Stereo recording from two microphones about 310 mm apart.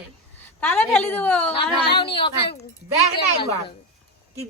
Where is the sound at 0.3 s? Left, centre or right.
Centre.